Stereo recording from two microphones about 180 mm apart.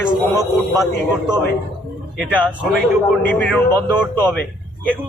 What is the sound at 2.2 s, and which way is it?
Speech, 10° left (ahead or behind).